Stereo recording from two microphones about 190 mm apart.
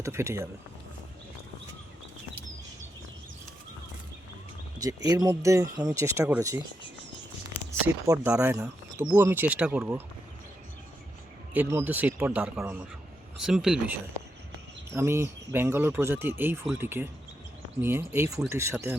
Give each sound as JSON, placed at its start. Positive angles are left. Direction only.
{"t": 0.0, "sound": "speech", "side_deg": -15}
{"t": 5.0, "sound": "speech", "side_deg": -20}
{"t": 7.7, "sound": "speech", "side_deg": -15}
{"t": 11.5, "sound": "speech", "side_deg": -10}
{"t": 14.9, "sound": "speech", "side_deg": -15}